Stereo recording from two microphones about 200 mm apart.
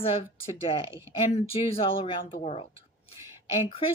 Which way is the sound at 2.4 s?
30° left (ahead or behind).